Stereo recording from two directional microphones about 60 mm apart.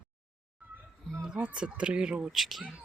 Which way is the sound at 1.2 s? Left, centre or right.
Right.